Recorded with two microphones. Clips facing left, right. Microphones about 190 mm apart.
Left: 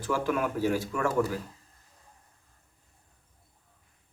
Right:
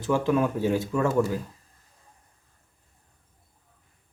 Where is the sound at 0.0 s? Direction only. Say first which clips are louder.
Right 5 dB; 25° right (ahead or behind).